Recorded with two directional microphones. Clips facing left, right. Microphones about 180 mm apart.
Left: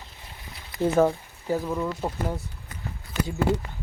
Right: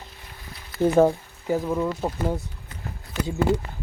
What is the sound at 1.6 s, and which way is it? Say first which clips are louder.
Speech: right 3 dB; centre (ahead or behind).